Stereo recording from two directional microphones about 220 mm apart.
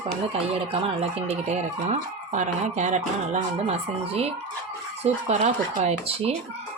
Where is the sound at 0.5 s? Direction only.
25° right (ahead or behind).